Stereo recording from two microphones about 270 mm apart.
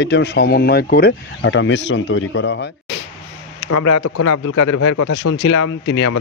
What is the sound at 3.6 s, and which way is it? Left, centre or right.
Speech, left.